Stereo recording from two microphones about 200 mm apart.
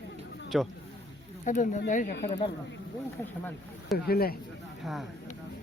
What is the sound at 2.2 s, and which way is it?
Speech, 25° left (ahead or behind).